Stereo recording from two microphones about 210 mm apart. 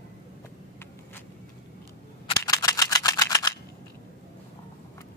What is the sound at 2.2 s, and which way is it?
Camera, 20° left (ahead or behind).